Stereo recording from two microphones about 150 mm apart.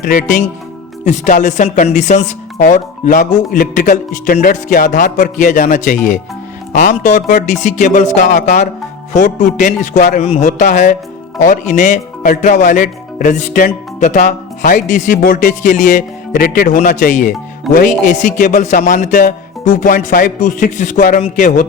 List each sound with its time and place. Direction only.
0.0 s speech: 60° left (ahead or behind)
2.6 s speech: 70° left (ahead or behind)